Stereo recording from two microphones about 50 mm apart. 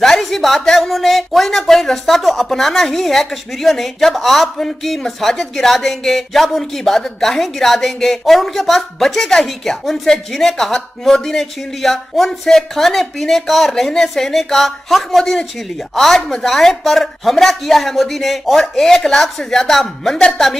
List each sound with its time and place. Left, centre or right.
0.0 s speech: centre